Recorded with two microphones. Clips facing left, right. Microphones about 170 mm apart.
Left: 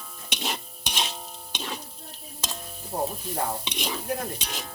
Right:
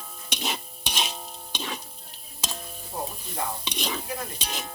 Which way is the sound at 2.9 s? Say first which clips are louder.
Left 5 dB; 35° left (ahead or behind).